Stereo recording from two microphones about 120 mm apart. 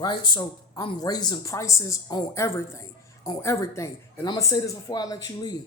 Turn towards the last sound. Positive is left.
turn(degrees=30)  # may be behind; listen again after turning